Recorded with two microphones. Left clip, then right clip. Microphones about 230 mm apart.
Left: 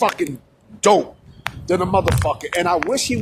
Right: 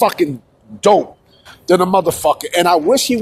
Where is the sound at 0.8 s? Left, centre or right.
Centre.